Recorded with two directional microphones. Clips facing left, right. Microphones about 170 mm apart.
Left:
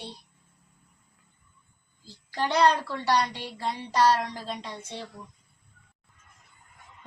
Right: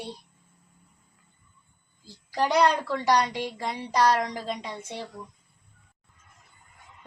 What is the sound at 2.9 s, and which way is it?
Speech, 15° right (ahead or behind).